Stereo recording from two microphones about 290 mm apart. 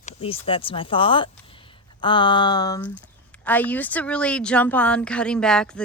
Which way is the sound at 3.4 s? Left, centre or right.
Centre.